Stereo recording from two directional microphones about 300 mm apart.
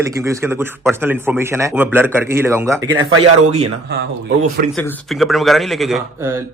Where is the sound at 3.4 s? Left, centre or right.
Right.